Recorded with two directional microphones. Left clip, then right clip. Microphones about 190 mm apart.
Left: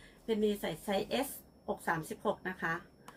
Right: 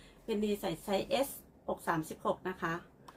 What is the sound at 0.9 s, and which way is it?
A woman's voice, 20° right (ahead or behind).